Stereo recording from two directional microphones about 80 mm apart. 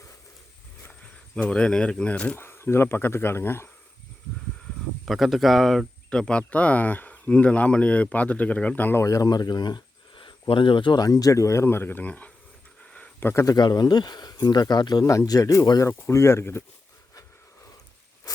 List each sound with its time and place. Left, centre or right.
1.4 s speech: centre
2.4 s speech: left
5.0 s speech: centre; by 9.0 s left
9.0 s speech: left
11.0 s speech: left
13.6 s speech: left
15.3 s speech: left
15.9 s speech: left